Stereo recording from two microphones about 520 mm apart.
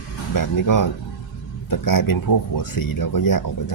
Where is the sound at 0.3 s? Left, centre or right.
Left.